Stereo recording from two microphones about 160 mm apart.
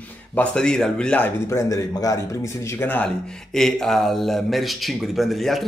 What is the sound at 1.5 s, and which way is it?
Speech, 20° left (ahead or behind).